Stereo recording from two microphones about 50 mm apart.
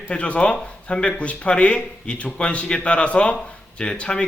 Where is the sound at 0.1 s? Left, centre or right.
Left.